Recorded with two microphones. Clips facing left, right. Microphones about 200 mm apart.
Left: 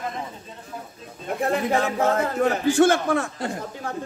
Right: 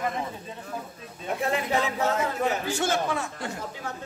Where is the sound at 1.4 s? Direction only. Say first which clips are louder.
Left 4 dB; 50° left (ahead or behind).